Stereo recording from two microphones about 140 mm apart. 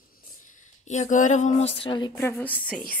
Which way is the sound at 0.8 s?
60° left (ahead or behind).